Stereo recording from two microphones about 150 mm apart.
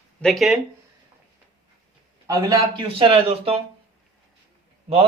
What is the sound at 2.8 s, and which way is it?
Speech, 40° right (ahead or behind).